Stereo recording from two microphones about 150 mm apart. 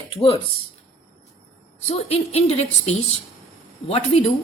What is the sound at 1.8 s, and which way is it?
A woman's voice, 45° left (ahead or behind).